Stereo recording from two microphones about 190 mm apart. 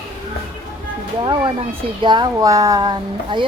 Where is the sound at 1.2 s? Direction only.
25° right (ahead or behind).